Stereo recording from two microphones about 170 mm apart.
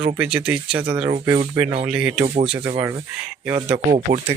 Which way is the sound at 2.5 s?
25° right (ahead or behind).